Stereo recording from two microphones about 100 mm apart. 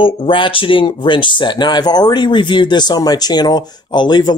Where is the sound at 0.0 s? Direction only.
60° left (ahead or behind).